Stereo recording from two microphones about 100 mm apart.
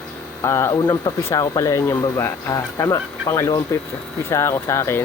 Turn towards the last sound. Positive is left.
turn(degrees=25)  # may be behind; listen again after turning